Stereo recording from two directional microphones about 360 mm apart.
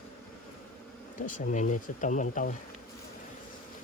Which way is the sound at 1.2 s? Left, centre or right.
Left.